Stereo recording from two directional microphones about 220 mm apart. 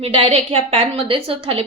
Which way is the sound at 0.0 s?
25° right (ahead or behind).